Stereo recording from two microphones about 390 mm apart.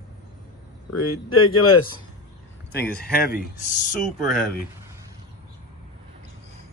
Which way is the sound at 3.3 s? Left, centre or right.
Left.